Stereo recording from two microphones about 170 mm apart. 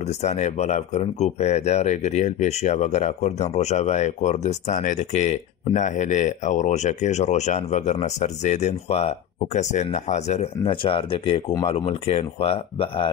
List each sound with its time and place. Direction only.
0.2 s speech: 40° left (ahead or behind)